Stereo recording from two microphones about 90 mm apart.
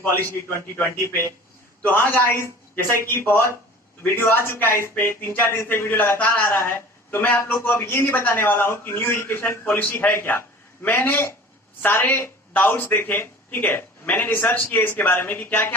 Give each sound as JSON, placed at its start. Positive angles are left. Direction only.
{"t": 1.8, "sound": "a man's voice", "side_deg": 20}